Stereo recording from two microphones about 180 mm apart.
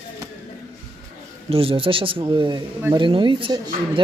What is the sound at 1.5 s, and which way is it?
A man's voice, 30° right (ahead or behind).